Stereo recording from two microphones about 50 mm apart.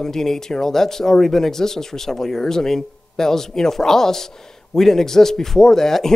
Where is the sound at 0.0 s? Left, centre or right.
Centre.